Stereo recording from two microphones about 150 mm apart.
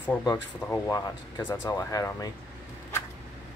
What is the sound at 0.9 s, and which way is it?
Speech, 25° left (ahead or behind).